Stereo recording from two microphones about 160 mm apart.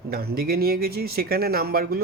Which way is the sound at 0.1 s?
75° right (ahead or behind).